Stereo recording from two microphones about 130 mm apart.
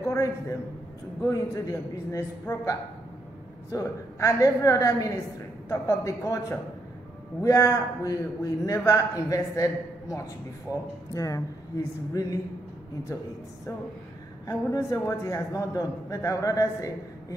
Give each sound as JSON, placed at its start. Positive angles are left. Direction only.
{"t": 0.0, "sound": "a man's voice", "side_deg": 25}
{"t": 14.4, "sound": "a man's voice", "side_deg": 25}